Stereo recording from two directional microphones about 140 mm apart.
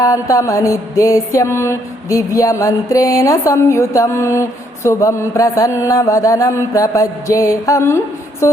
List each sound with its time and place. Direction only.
0.0 s mantra: 25° left (ahead or behind)